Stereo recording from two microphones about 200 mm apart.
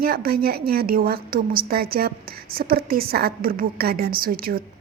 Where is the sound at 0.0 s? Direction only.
50° right (ahead or behind).